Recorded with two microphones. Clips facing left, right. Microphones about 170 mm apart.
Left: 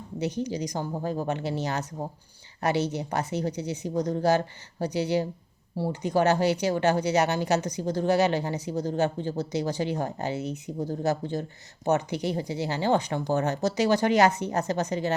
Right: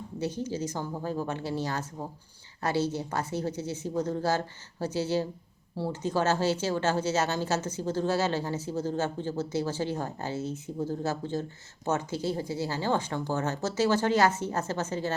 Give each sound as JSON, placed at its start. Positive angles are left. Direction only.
{"t": 0.2, "sound": "speech", "side_deg": 20}